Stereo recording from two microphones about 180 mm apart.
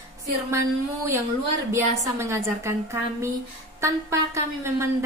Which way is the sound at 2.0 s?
15° right (ahead or behind).